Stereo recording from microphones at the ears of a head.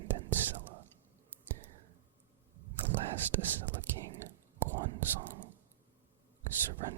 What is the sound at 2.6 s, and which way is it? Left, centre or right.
Whispering, right.